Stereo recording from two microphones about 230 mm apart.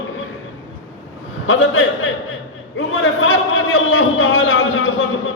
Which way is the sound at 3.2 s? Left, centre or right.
Left.